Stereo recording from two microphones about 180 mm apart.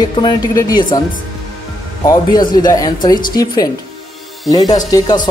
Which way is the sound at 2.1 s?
25° left (ahead or behind).